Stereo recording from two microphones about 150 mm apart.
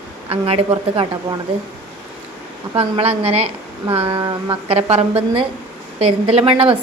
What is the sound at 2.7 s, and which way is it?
A woman's voice, 40° right (ahead or behind).